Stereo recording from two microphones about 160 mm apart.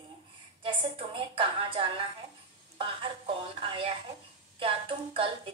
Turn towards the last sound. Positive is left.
turn(degrees=-35)  # may be behind; listen again after turning